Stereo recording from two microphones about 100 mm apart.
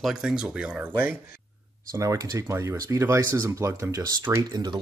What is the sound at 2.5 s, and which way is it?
Speech, 30° right (ahead or behind).